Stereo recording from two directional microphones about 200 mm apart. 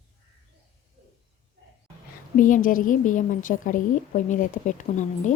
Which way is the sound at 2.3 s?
40° left (ahead or behind).